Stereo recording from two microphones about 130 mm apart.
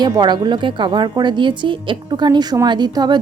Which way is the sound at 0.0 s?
35° right (ahead or behind).